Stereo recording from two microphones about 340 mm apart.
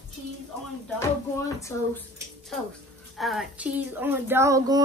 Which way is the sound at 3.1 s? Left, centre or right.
Centre.